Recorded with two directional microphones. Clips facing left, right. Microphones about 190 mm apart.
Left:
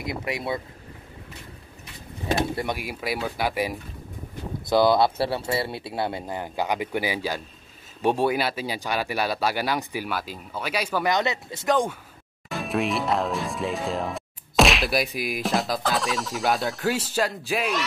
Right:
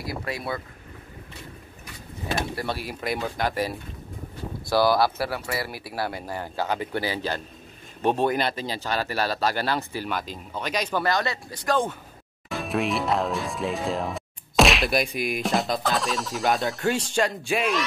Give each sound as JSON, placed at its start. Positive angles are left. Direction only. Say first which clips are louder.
{"t": 0.0, "sound": "speech", "louder": "left 2 dB", "side_deg": 20}
{"t": 2.5, "sound": "speech", "louder": "left 1 dB", "side_deg": 15}
{"t": 4.6, "sound": "speech", "louder": "left 2 dB", "side_deg": 20}
{"t": 11.1, "sound": "speech", "louder": "left 2 dB", "side_deg": 20}
{"t": 12.4, "sound": "speech", "louder": "even", "side_deg": 0}